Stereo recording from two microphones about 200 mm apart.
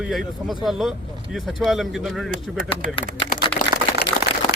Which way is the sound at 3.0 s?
35° left (ahead or behind).